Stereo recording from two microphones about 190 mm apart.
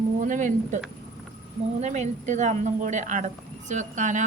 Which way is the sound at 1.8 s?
35° right (ahead or behind).